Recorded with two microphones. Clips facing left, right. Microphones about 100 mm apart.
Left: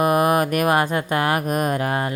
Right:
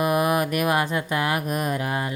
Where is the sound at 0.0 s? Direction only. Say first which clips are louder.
Left 4 dB; 50° left (ahead or behind).